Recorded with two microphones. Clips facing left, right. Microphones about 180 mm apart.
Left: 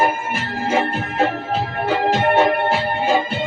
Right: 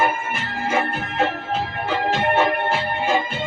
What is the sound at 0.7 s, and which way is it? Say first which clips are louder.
Music: left 3 dB; 40° left (ahead or behind).